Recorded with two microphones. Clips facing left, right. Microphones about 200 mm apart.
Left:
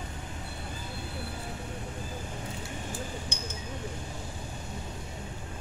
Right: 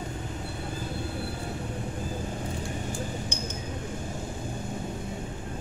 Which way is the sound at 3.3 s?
50° right (ahead or behind).